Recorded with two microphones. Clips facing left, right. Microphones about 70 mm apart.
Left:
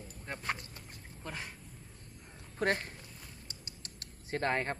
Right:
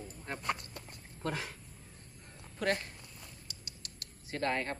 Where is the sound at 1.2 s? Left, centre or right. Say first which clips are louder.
Right 6 dB; right.